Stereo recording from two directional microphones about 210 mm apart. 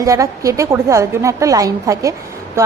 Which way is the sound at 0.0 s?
15° right (ahead or behind).